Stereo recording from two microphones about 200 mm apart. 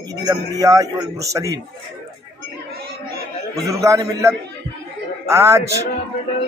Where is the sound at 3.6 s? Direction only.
15° right (ahead or behind).